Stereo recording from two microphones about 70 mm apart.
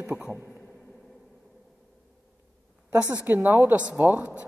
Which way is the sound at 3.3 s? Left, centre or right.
Right.